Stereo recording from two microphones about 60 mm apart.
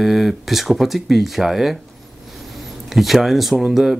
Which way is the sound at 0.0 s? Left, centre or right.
Centre.